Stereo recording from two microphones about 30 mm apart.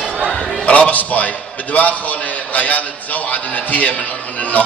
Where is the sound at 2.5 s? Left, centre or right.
Left.